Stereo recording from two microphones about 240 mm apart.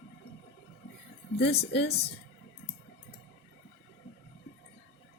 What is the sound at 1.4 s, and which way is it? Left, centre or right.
Speech, left.